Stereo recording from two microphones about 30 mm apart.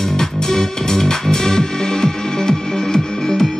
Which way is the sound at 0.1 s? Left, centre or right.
Centre.